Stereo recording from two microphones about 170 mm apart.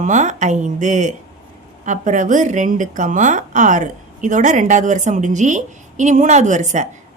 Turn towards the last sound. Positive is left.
turn(degrees=-45)  # may be behind; listen again after turning